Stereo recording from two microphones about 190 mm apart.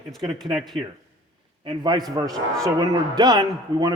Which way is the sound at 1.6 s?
25° right (ahead or behind).